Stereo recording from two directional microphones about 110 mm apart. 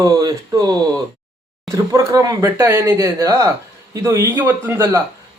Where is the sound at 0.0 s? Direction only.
35° right (ahead or behind).